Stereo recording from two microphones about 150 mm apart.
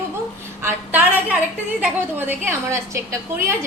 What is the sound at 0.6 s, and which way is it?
A woman's voice, 10° right (ahead or behind).